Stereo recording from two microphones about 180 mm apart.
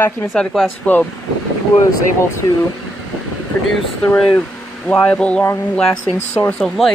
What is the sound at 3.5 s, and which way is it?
Speech, 10° left (ahead or behind).